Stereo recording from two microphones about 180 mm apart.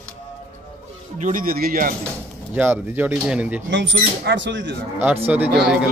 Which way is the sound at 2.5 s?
10° right (ahead or behind).